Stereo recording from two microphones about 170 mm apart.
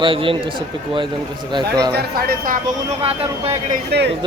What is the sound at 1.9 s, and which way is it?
Speech, 60° right (ahead or behind).